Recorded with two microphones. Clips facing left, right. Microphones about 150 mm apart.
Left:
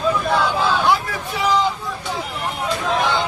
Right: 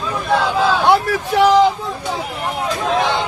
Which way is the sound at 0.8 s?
70° right (ahead or behind).